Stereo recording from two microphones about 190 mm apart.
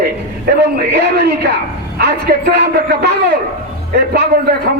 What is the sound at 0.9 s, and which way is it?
A man's voice, 60° right (ahead or behind).